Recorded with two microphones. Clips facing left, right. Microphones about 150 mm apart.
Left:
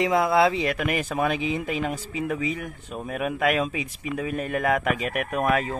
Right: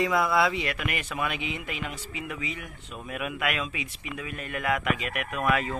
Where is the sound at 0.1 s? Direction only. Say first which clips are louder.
Left 4 dB; 25° left (ahead or behind); by 5.6 s 45° left (ahead or behind).